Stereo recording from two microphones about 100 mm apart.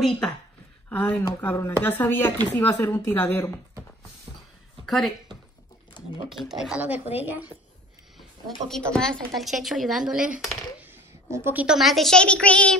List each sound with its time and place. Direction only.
0.8 s speech: 15° left (ahead or behind)
4.8 s a woman's voice: centre (ahead or behind)
6.2 s speech: centre (ahead or behind)
6.8 s a woman's voice: 20° right (ahead or behind)
8.2 s speech: centre (ahead or behind)
10.8 s a sound: 25° right (ahead or behind)
11.5 s speech: 5° right (ahead or behind); by 12.7 s 10° left (ahead or behind)